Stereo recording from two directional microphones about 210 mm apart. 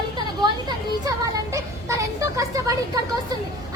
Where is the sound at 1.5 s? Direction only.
15° right (ahead or behind).